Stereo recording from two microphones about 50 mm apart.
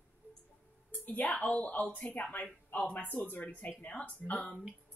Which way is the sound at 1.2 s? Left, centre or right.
Left.